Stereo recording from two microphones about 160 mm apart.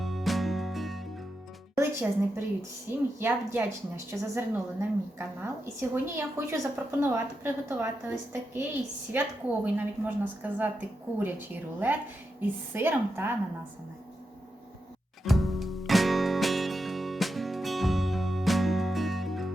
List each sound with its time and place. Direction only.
0.0 s music: centre (ahead or behind)
1.7 s a woman's voice: 15° right (ahead or behind)
15.2 s music: centre (ahead or behind)